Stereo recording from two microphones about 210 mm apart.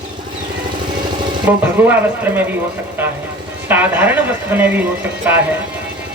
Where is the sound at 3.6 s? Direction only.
10° right (ahead or behind).